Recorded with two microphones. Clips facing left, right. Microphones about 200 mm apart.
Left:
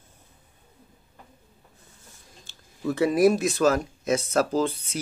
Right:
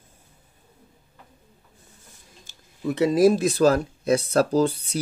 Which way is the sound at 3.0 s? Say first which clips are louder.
Right 2 dB; 25° right (ahead or behind).